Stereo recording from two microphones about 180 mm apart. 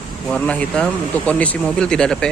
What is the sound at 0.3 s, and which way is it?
Speech, 5° left (ahead or behind).